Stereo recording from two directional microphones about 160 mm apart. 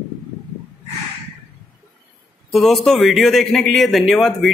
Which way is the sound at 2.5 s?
Centre (ahead or behind).